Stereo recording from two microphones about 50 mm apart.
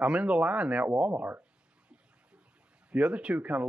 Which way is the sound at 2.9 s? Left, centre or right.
Right.